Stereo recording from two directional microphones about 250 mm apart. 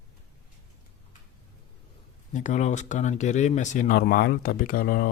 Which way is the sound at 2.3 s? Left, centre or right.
Left.